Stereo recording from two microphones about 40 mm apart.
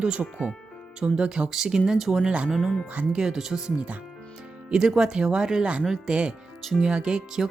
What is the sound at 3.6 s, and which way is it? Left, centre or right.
Speech, right.